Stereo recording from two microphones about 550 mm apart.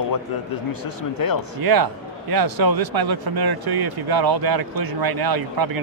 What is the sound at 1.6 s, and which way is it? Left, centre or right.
Speech, right.